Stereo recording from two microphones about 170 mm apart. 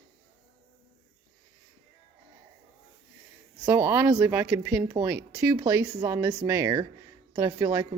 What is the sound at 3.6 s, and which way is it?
Speech, 15° right (ahead or behind).